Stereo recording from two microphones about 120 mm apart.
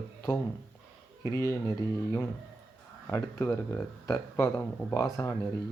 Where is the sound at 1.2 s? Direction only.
25° left (ahead or behind).